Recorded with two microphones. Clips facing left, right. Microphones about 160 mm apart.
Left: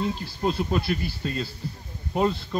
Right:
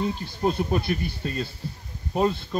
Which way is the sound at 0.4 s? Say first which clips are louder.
Right 1 dB; 15° right (ahead or behind).